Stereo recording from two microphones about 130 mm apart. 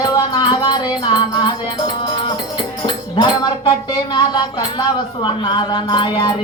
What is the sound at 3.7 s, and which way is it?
Speech, 35° left (ahead or behind).